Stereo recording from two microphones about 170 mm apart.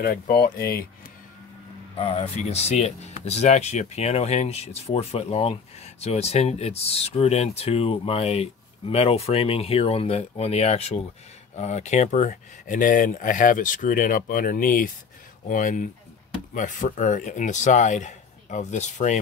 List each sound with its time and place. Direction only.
0.0 s speech: 60° left (ahead or behind)
2.0 s speech: 35° left (ahead or behind)